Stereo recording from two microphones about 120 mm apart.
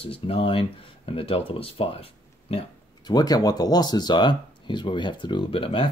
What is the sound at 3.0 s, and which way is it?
Speech, 35° left (ahead or behind).